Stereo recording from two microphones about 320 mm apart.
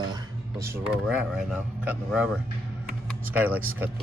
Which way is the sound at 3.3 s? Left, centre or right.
Centre.